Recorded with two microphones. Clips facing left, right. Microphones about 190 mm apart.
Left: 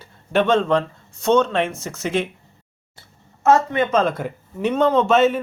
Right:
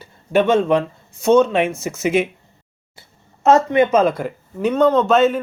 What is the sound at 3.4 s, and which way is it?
Speech, 15° right (ahead or behind).